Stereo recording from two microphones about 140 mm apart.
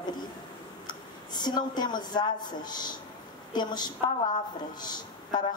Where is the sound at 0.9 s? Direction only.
30° left (ahead or behind).